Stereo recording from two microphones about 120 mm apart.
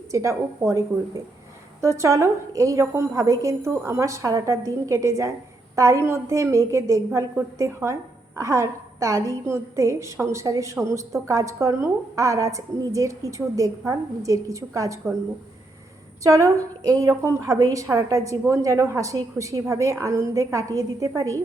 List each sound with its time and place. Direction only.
0.1 s a woman's voice: 25° right (ahead or behind)
16.2 s a woman's voice: 25° right (ahead or behind)